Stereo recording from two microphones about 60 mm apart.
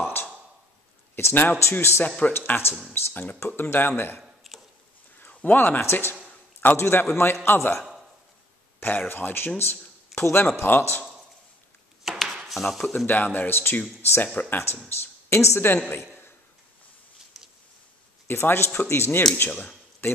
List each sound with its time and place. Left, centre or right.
1.1 s speech: left
2.0 s speech: centre
2.3 s speech: left
4.4 s a sound: centre
5.3 s speech: left
5.8 s speech: left
12.0 s chop: centre
13.0 s speech: left
14.2 s speech: left
14.9 s speech: left
18.2 s speech: left